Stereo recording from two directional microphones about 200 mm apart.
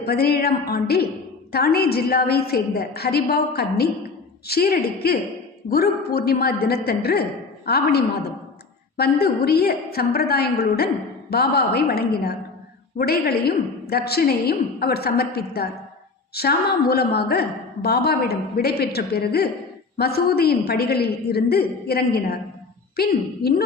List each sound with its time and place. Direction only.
0.0 s a woman's voice: 50° left (ahead or behind)